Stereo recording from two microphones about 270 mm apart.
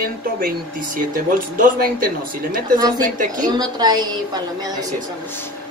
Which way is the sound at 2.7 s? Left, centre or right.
Centre.